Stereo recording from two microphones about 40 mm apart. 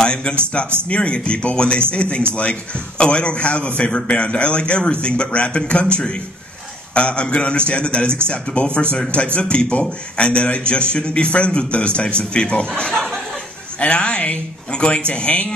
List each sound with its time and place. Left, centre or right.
0.0 s a man's voice: left
12.9 s speech: centre
13.7 s a man's voice: left